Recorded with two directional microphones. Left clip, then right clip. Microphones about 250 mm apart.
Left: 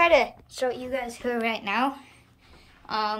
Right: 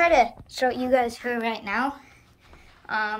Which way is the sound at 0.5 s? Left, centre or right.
Centre.